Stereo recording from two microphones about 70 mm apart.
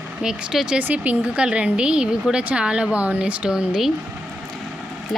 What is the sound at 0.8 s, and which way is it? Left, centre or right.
Speech, right.